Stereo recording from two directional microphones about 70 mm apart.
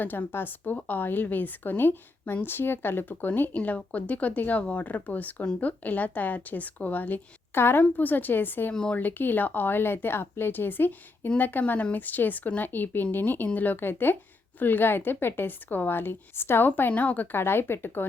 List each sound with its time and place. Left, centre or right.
0.0 s a woman's voice: left
8.7 s speech: centre
9.0 s a woman's voice: left